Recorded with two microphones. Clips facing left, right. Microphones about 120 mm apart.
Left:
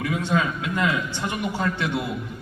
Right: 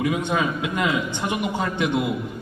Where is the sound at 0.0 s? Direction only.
20° right (ahead or behind).